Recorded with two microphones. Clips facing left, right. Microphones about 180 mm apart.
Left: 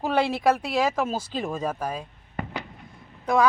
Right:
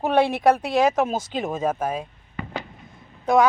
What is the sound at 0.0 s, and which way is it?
Speech, 20° right (ahead or behind).